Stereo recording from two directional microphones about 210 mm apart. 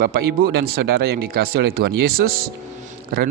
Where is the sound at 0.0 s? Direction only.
45° right (ahead or behind).